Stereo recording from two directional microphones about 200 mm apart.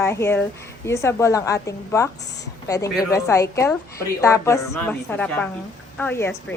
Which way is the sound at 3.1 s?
15° left (ahead or behind).